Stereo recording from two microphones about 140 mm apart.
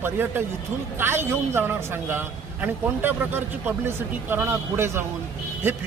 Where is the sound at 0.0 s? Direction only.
15° right (ahead or behind).